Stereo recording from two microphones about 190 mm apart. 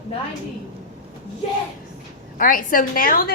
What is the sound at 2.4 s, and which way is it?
Speech, 45° left (ahead or behind).